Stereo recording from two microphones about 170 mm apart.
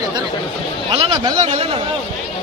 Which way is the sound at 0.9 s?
25° right (ahead or behind).